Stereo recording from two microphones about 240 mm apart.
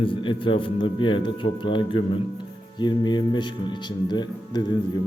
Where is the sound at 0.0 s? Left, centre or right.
Left.